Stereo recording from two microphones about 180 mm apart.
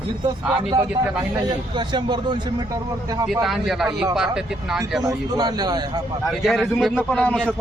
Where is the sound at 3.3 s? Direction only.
Centre (ahead or behind).